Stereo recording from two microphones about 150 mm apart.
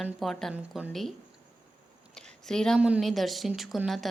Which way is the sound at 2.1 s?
5° left (ahead or behind).